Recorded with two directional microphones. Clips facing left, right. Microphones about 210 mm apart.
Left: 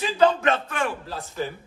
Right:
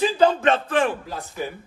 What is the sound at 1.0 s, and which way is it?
Speech, 15° right (ahead or behind).